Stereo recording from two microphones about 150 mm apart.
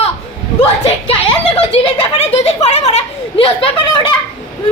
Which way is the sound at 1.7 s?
40° left (ahead or behind).